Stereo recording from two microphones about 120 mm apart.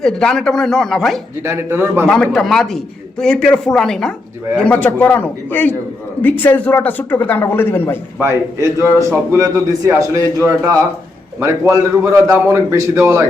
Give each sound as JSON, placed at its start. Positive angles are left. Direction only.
{"t": 0.0, "sound": "a man's voice", "side_deg": 5}
{"t": 1.4, "sound": "a man's voice", "side_deg": -20}
{"t": 2.0, "sound": "a man's voice", "side_deg": 5}
{"t": 8.2, "sound": "a man's voice", "side_deg": -25}
{"t": 11.3, "sound": "a man's voice", "side_deg": -25}